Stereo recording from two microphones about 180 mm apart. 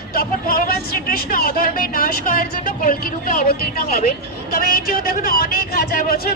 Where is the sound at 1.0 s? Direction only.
55° left (ahead or behind).